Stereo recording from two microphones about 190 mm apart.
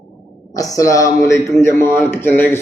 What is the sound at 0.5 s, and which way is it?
A man's voice, 20° left (ahead or behind).